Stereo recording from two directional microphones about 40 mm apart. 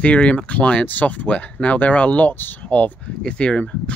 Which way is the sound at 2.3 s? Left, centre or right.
Left.